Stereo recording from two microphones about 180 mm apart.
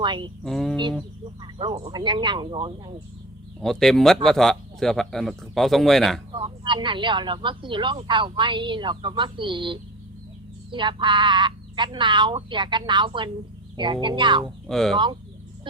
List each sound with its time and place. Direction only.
0.0 s speech: 25° right (ahead or behind)
0.4 s speech: centre (ahead or behind)
1.4 s speech: 30° right (ahead or behind)
3.6 s speech: centre (ahead or behind)
6.3 s speech: 30° right (ahead or behind)
14.7 s speech: centre (ahead or behind)